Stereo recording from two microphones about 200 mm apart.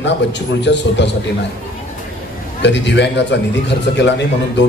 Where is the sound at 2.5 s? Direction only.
60° left (ahead or behind).